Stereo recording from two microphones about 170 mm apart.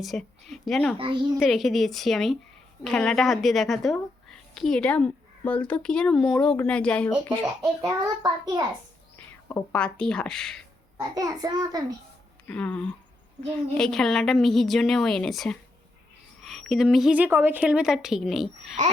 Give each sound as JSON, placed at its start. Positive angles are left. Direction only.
{"t": 0.0, "sound": "a woman's voice", "side_deg": 0}
{"t": 0.9, "sound": "a child's voice", "side_deg": -30}
{"t": 1.4, "sound": "a woman's voice", "side_deg": 0}
{"t": 7.9, "sound": "a child's voice", "side_deg": -20}
{"t": 9.5, "sound": "a woman's voice", "side_deg": 10}
{"t": 10.9, "sound": "a child's voice", "side_deg": -20}
{"t": 12.5, "sound": "a woman's voice", "side_deg": 5}